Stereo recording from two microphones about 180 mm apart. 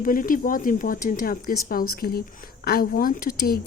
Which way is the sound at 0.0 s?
50° left (ahead or behind).